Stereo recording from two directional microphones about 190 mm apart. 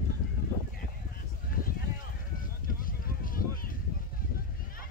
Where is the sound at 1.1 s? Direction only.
50° left (ahead or behind).